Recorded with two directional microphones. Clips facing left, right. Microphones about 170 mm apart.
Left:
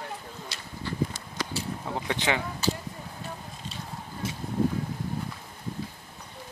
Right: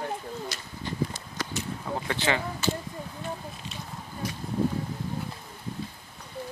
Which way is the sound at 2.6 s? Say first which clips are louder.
Even; 35° left (ahead or behind).